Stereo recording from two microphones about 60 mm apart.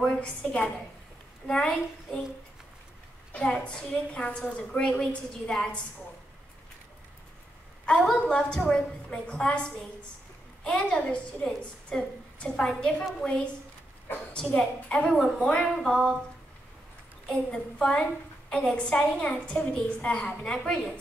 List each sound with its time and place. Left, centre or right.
0.0 s a woman's voice: centre
3.6 s a woman's voice: centre
7.8 s a woman's voice: centre
14.5 s a woman's voice: centre
17.3 s a woman's voice: centre